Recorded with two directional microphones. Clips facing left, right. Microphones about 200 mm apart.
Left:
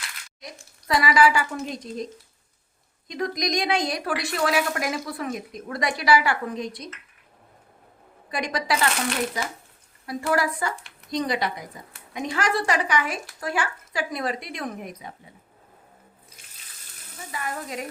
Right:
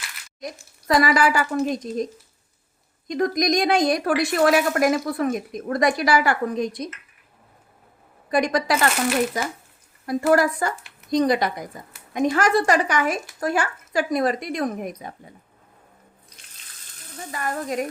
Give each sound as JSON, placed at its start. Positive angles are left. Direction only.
{"t": 0.9, "sound": "a woman's voice", "side_deg": -45}
{"t": 3.1, "sound": "a woman's voice", "side_deg": -50}
{"t": 8.3, "sound": "a woman's voice", "side_deg": -45}
{"t": 16.3, "sound": "water", "side_deg": 5}
{"t": 17.3, "sound": "a woman's voice", "side_deg": -45}